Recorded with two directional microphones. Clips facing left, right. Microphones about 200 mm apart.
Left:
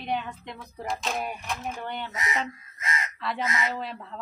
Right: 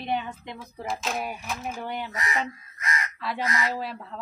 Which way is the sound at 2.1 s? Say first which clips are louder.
Right 1 dB; 20° left (ahead or behind).